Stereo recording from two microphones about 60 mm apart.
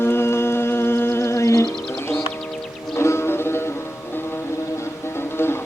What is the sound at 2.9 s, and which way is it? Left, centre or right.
Music, left.